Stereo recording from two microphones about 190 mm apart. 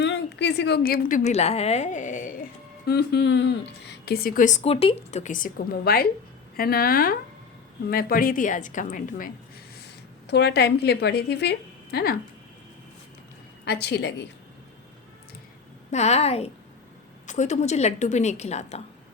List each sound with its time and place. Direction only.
0.0 s a woman's voice: 65° left (ahead or behind); by 2.3 s 40° left (ahead or behind)
2.8 s speech: 60° left (ahead or behind)
10.2 s a woman's voice: 60° left (ahead or behind)
13.7 s a woman's voice: 60° left (ahead or behind)
15.9 s a woman's voice: 35° left (ahead or behind)